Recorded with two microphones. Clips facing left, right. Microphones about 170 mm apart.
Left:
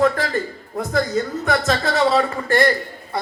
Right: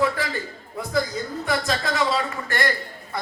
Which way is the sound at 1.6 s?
40° left (ahead or behind).